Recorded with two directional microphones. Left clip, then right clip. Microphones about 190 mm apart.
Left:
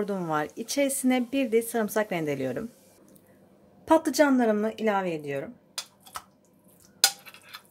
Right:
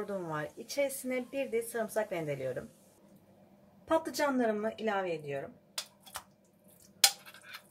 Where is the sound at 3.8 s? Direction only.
55° left (ahead or behind).